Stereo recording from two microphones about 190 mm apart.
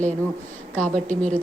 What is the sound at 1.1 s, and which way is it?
Speech, 40° right (ahead or behind).